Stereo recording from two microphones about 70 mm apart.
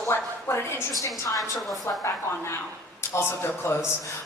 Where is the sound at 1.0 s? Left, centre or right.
Left.